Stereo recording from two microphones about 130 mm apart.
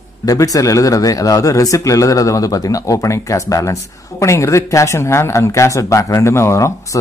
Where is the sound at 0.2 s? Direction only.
25° left (ahead or behind).